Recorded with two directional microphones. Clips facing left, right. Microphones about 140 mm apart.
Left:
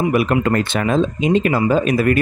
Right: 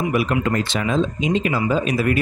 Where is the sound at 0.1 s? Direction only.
55° left (ahead or behind).